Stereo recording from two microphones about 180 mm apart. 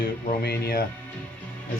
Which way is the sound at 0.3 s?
60° left (ahead or behind).